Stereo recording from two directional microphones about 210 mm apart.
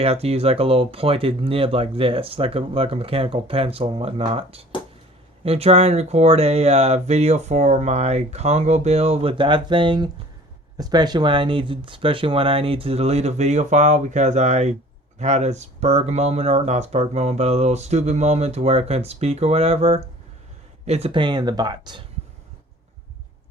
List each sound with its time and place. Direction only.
0.0 s speech: 30° right (ahead or behind)